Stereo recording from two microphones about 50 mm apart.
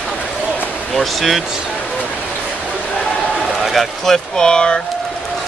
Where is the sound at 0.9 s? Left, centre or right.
Centre.